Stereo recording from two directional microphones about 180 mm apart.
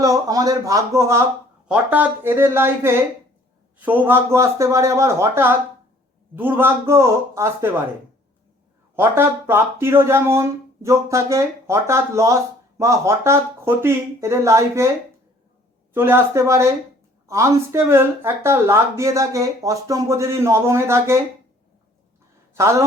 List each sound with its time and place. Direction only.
0.0 s speech: 20° right (ahead or behind)
9.0 s speech: 15° right (ahead or behind)
16.0 s speech: 15° right (ahead or behind)
22.5 s speech: 15° right (ahead or behind)